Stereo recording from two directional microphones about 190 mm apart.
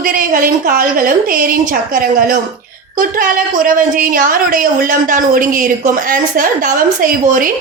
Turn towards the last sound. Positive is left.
turn(degrees=-45)  # may be behind; listen again after turning